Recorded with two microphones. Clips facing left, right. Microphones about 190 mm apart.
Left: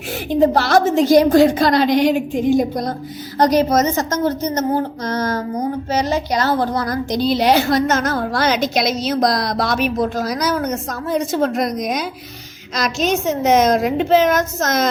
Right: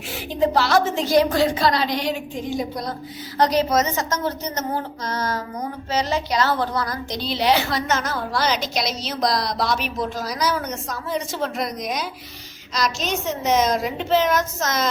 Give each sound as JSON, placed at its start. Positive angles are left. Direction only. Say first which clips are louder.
{"t": 0.4, "sound": "a woman's voice", "louder": "left 3 dB", "side_deg": 45}